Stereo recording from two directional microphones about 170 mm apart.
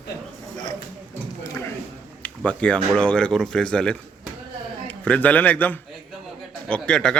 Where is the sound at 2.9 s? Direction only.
5° left (ahead or behind).